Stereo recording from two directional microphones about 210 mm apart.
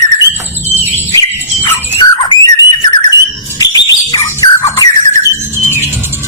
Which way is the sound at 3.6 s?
20° left (ahead or behind).